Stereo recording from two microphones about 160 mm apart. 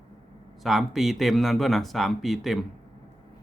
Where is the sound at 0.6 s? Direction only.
Centre (ahead or behind).